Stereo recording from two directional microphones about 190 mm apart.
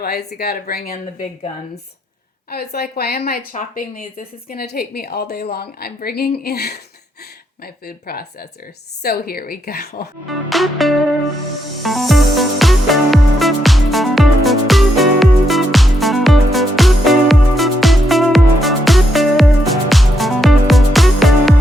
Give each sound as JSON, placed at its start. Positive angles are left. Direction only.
{"t": 0.0, "sound": "a woman's voice", "side_deg": 55}
{"t": 2.5, "sound": "a woman's voice", "side_deg": 55}
{"t": 10.2, "sound": "music", "side_deg": 0}